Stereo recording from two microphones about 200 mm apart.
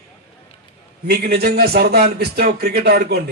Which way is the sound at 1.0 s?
55° right (ahead or behind).